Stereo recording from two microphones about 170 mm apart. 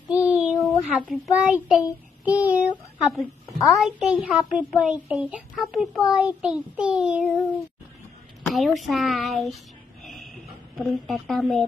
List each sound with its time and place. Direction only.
0.1 s child singing: 5° right (ahead or behind)
0.7 s a child's voice: 5° right (ahead or behind)
8.5 s a child's voice: centre (ahead or behind)
10.0 s a sound: centre (ahead or behind)
10.8 s a child's voice: centre (ahead or behind)